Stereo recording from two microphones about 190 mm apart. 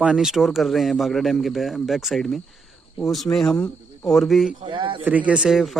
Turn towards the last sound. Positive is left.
turn(degrees=0)  # may be behind; listen again after turning